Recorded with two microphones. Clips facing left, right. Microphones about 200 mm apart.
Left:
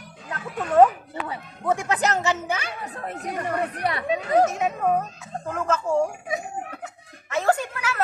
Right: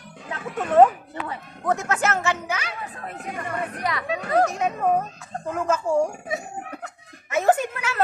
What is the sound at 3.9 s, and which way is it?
Speech, 25° left (ahead or behind).